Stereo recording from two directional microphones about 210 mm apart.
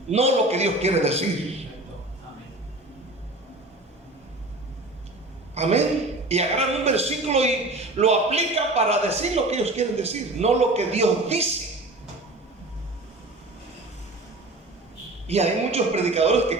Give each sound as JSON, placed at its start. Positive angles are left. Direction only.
{"t": 0.1, "sound": "a man's voice", "side_deg": -30}
{"t": 5.5, "sound": "a man's voice", "side_deg": -30}
{"t": 15.3, "sound": "a man's voice", "side_deg": -30}